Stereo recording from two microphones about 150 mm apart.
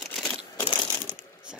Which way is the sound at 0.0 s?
Centre (ahead or behind).